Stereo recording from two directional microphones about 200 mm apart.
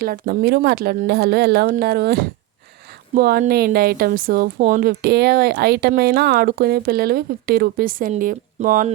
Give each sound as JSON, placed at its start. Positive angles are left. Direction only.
{"t": 0.0, "sound": "speech", "side_deg": -45}